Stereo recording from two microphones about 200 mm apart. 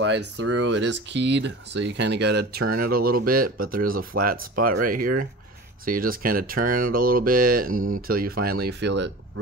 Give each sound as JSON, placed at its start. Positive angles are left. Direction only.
{"t": 0.0, "sound": "speech", "side_deg": -60}